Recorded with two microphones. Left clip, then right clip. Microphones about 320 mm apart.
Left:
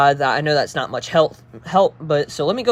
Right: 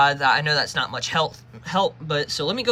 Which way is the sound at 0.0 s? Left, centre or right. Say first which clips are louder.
Left 2 dB; centre.